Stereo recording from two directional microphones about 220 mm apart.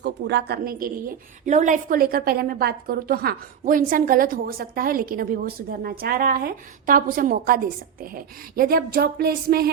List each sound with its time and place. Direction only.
0.0 s a woman's voice: 50° right (ahead or behind)